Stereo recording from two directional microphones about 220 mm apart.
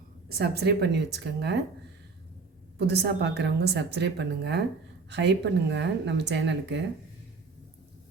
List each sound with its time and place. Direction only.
0.3 s a woman's voice: 45° right (ahead or behind)
2.7 s a woman's voice: 50° right (ahead or behind)